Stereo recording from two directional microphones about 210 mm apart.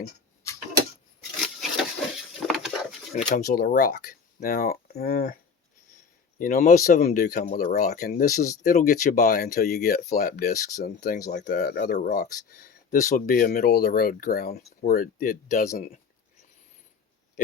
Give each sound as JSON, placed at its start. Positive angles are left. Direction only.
{"t": 2.5, "sound": "pigeon", "side_deg": 0}
{"t": 3.2, "sound": "speech", "side_deg": 40}
{"t": 6.4, "sound": "speech", "side_deg": 40}